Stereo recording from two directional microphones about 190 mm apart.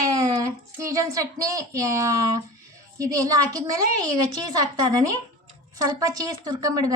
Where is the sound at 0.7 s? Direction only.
15° right (ahead or behind).